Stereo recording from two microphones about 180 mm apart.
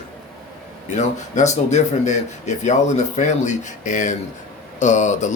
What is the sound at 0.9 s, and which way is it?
Speech, 40° left (ahead or behind).